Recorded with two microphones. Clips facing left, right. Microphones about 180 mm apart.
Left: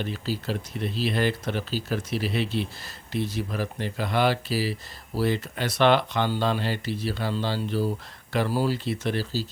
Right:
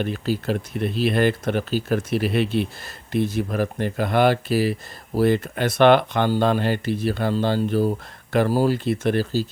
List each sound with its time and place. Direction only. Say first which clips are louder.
0.0 s speech: right 6 dB; 55° right (ahead or behind)